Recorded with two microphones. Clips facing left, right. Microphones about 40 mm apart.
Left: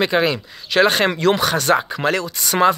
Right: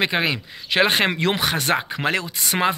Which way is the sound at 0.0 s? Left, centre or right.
Right.